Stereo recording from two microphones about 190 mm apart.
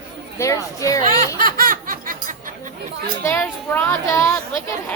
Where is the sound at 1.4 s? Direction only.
50° right (ahead or behind).